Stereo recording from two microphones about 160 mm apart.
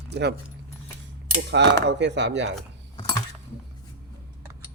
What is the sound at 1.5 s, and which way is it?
Speech, 90° right.